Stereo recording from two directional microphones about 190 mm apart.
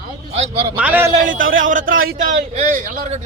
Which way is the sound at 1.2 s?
45° right (ahead or behind).